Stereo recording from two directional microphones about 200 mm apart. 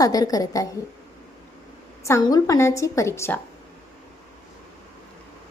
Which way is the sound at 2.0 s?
15° left (ahead or behind).